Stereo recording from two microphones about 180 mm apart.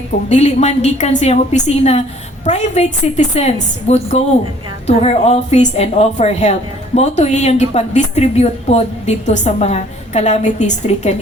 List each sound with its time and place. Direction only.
0.3 s a woman's voice: 40° left (ahead or behind)